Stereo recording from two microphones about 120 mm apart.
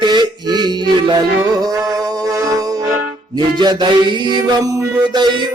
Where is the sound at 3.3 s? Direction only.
35° right (ahead or behind).